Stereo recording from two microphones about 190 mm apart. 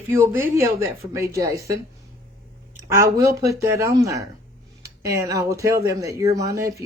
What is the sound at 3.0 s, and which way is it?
Speech, 15° right (ahead or behind).